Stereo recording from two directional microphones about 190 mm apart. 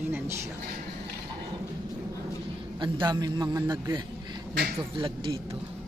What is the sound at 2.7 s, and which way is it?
A man's voice, 25° right (ahead or behind).